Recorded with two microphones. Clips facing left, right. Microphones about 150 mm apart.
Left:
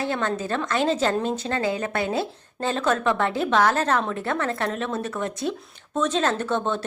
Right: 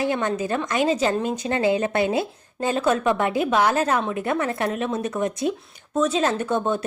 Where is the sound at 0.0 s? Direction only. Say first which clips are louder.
Right 3 dB; 15° right (ahead or behind).